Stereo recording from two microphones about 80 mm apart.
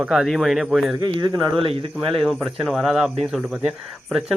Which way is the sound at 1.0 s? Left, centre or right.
Right.